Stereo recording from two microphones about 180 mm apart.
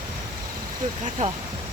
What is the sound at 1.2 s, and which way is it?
Speech, 45° right (ahead or behind).